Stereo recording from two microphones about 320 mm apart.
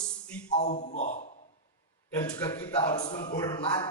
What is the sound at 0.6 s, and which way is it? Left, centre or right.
Speech, left.